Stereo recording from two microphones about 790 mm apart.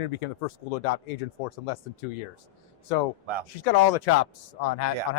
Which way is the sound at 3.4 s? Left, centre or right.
Left.